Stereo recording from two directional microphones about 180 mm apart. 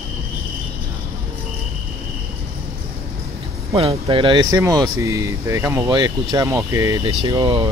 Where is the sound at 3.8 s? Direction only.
35° right (ahead or behind).